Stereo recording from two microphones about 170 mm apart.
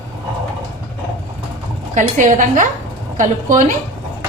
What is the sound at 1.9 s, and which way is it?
A woman's voice, 50° right (ahead or behind).